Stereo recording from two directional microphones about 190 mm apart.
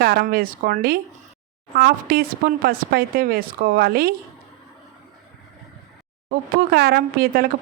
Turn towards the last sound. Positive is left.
turn(degrees=-50)  # may be behind; listen again after turning